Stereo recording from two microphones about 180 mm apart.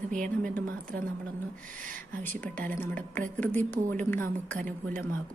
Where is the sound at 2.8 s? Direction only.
10° left (ahead or behind).